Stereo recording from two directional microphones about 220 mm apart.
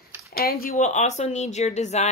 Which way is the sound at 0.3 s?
45° left (ahead or behind).